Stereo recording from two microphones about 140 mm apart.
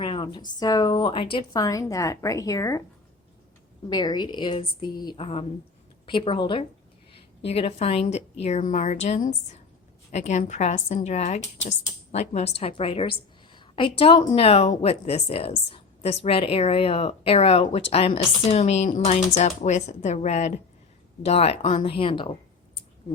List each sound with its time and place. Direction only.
0.0 s a sound: 35° left (ahead or behind)
0.6 s speech: 30° left (ahead or behind)
1.6 s a woman's voice: 25° left (ahead or behind)
3.8 s speech: 30° left (ahead or behind)
5.2 s a woman's voice: 45° left (ahead or behind)